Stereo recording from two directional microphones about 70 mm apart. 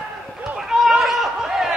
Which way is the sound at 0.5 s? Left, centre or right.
Centre.